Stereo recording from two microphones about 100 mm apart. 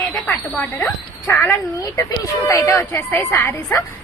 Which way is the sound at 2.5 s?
35° left (ahead or behind).